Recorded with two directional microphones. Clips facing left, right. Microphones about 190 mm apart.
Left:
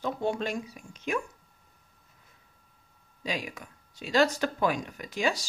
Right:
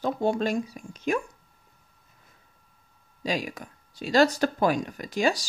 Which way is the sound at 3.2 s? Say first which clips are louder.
Right 5 dB; 35° right (ahead or behind).